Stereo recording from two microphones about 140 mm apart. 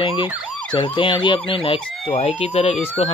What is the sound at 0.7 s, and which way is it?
Speech, 35° left (ahead or behind).